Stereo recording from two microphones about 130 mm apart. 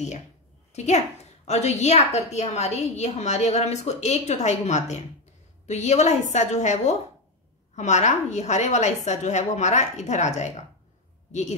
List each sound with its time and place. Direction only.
0.7 s a woman's voice: 60° left (ahead or behind)